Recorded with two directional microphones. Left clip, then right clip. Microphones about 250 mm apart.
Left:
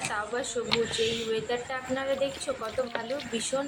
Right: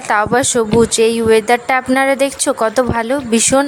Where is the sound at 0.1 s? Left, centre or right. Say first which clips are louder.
Right 18 dB; right.